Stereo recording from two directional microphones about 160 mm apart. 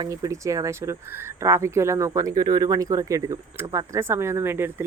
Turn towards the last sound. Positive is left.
turn(degrees=-15)  # may be behind; listen again after turning